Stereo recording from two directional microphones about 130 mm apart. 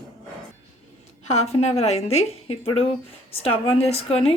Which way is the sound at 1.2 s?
55° left (ahead or behind).